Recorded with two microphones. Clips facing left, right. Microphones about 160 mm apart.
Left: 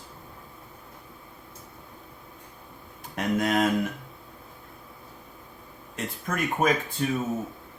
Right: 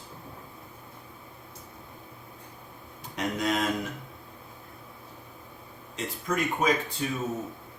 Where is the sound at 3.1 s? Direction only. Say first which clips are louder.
Left 4 dB; 55° left (ahead or behind).